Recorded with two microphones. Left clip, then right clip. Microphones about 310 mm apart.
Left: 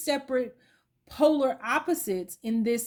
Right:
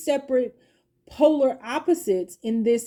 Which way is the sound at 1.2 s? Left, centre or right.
Left.